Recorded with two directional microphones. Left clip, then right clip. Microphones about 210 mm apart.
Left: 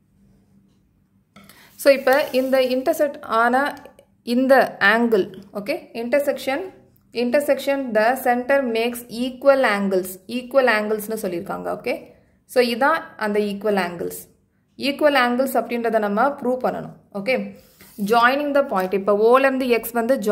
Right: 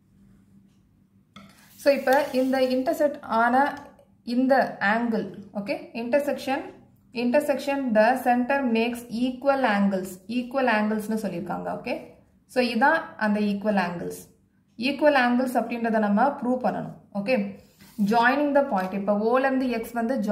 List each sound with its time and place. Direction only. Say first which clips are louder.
1.8 s a woman's voice: left 5 dB; 50° left (ahead or behind)
15.0 s a woman's voice: left 3 dB; 50° left (ahead or behind)